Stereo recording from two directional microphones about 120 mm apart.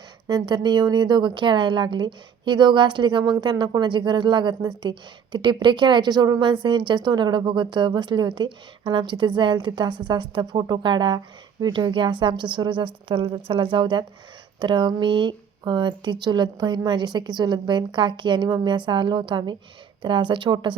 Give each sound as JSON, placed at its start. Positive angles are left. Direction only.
{"t": 0.3, "sound": "a woman's voice", "side_deg": -35}